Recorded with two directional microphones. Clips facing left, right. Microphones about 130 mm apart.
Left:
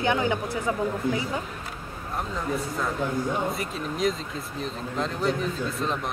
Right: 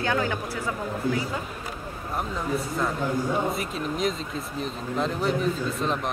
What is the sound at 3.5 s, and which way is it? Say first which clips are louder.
A man's voice: right 2 dB; centre (ahead or behind).